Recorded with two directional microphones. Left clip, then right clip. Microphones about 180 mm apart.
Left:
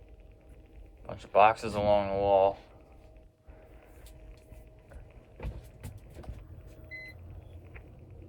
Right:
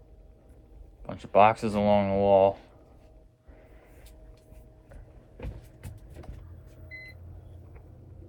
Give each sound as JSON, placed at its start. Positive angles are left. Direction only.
{"t": 1.0, "sound": "speech", "side_deg": -25}